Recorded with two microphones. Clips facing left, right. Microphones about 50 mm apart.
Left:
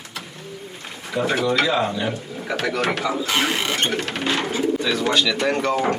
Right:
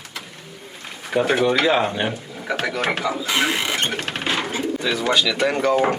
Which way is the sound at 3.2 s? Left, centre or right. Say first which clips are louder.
Right 2 dB; centre.